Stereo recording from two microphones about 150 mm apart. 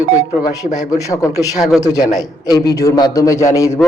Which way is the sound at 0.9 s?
20° left (ahead or behind).